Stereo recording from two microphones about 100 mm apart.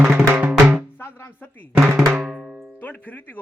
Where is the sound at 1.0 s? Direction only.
20° left (ahead or behind).